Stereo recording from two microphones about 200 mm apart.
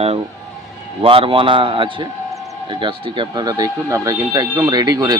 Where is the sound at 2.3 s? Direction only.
Centre (ahead or behind).